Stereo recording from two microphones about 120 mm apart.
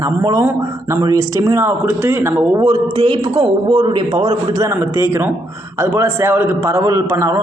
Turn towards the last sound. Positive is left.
turn(degrees=-25)  # may be behind; listen again after turning